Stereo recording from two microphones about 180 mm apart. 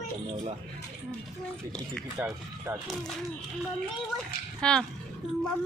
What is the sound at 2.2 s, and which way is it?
Speech, 10° right (ahead or behind).